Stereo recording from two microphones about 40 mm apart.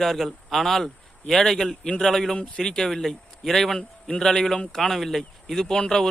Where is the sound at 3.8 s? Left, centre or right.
Left.